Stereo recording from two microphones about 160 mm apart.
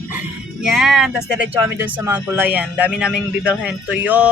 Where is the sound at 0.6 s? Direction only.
Centre (ahead or behind).